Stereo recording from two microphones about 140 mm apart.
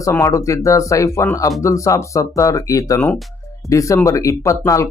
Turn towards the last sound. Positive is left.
turn(degrees=20)  # may be behind; listen again after turning